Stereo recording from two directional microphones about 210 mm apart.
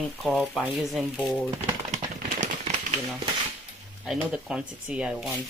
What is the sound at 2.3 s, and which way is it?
Typewriter, 35° right (ahead or behind).